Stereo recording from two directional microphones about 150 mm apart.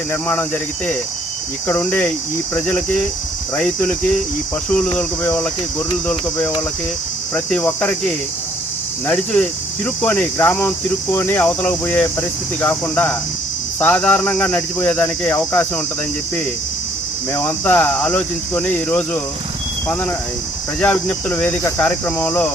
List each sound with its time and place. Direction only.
0.1 s cricket: 15° left (ahead or behind)
1.6 s cricket: 10° left (ahead or behind)
17.3 s cricket: 10° left (ahead or behind)